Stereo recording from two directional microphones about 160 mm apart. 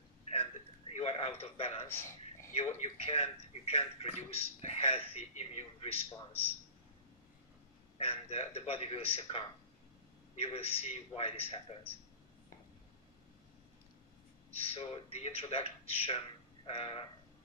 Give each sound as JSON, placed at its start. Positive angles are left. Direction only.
{"t": 0.3, "sound": "a sound", "side_deg": 40}
{"t": 2.8, "sound": "speech", "side_deg": 40}
{"t": 8.0, "sound": "speech", "side_deg": 40}
{"t": 14.5, "sound": "speech", "side_deg": 35}